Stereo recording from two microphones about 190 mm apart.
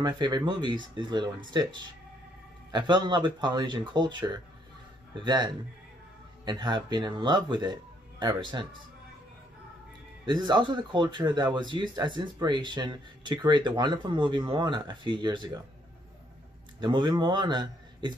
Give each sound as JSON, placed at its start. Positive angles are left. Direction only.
{"t": 0.0, "sound": "speech", "side_deg": -25}
{"t": 10.2, "sound": "speech", "side_deg": -25}
{"t": 16.8, "sound": "speech", "side_deg": -25}